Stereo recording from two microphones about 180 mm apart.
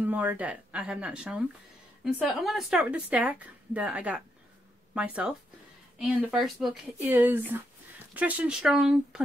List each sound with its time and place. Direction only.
0.0 s a woman's voice: 10° right (ahead or behind)